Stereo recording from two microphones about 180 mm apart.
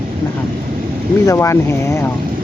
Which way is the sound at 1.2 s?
15° left (ahead or behind).